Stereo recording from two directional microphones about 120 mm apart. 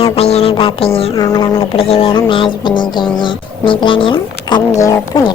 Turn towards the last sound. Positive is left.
turn(degrees=25)  # may be behind; listen again after turning